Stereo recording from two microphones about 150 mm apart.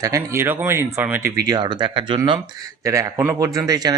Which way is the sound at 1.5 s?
30° right (ahead or behind).